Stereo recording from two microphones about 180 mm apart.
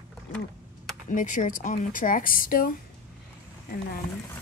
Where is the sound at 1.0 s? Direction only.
45° left (ahead or behind).